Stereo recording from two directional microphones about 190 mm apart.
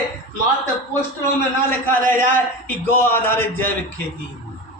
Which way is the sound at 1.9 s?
10° left (ahead or behind).